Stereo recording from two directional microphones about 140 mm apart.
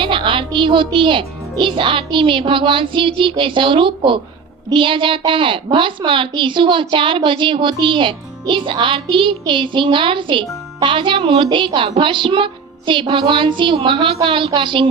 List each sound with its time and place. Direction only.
0.0 s music: 35° right (ahead or behind)
0.9 s a woman's voice: 35° right (ahead or behind)